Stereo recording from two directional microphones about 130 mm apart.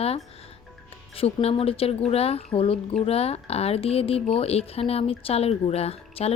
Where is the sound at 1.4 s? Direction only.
50° left (ahead or behind).